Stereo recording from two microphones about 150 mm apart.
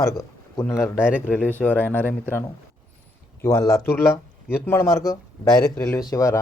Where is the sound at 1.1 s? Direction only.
10° right (ahead or behind).